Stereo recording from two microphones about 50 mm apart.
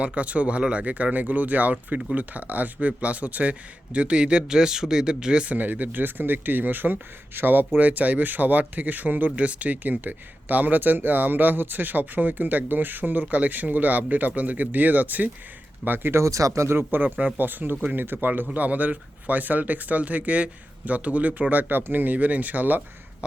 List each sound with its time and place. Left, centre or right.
0.0 s speech: right
5.5 s speech: right
16.1 s speech: right
16.7 s a man's voice: right